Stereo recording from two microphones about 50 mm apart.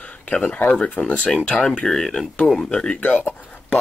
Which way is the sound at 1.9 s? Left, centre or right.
Centre.